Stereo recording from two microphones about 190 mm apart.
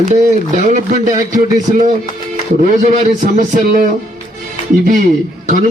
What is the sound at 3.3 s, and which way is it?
A man's voice, 45° right (ahead or behind).